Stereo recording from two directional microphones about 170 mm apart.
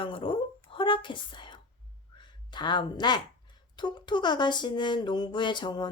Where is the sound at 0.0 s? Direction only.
30° left (ahead or behind).